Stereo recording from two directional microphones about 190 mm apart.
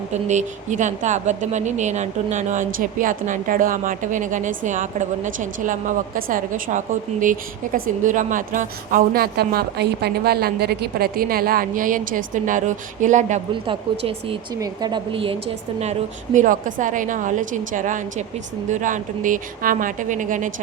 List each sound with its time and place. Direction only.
0.1 s a woman's voice: 40° right (ahead or behind)
14.5 s a woman's voice: 20° right (ahead or behind); by 20.5 s 40° right (ahead or behind)